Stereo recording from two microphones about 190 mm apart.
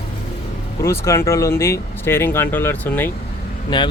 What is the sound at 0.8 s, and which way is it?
Speech, 15° left (ahead or behind).